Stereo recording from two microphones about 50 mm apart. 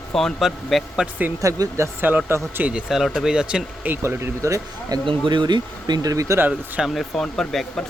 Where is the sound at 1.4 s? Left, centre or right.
Right.